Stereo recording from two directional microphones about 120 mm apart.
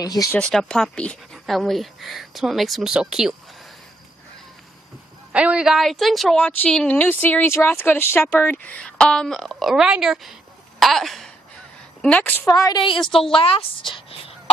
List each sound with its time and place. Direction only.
0.0 s a woman's voice: 30° left (ahead or behind)
0.3 s speech: 5° left (ahead or behind)
5.3 s a woman's voice: 10° right (ahead or behind)
10.8 s throat clearing: centre (ahead or behind)
12.0 s a woman's voice: 10° left (ahead or behind)
12.4 s a woman's voice: 30° left (ahead or behind)
12.8 s a woman's voice: 45° left (ahead or behind)